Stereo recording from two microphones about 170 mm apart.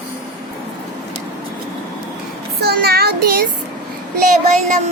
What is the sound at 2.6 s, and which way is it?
Child singing, 70° right (ahead or behind).